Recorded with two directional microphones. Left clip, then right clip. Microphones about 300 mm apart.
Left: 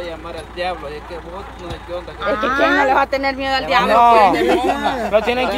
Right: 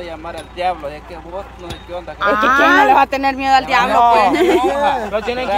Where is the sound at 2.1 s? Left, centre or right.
Centre.